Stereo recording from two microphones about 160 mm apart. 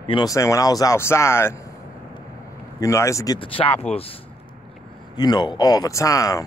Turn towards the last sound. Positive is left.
turn(degrees=20)  # may be behind; listen again after turning